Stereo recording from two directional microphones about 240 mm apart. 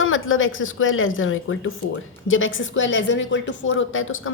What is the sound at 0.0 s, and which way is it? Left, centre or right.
A woman's voice, left.